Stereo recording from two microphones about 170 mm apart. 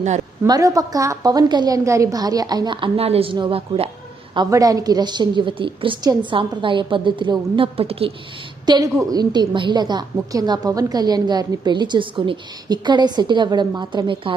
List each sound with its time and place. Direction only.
0.4 s a woman's voice: 20° right (ahead or behind)